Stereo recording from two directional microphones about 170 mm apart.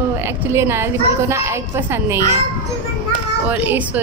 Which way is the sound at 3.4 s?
10° right (ahead or behind).